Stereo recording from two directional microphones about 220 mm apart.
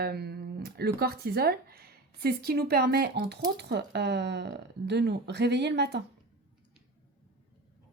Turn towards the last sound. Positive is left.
turn(degrees=-50)  # may be behind; listen again after turning